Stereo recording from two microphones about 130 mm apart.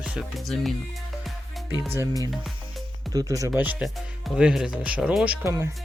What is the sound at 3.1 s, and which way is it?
Speech, 30° right (ahead or behind).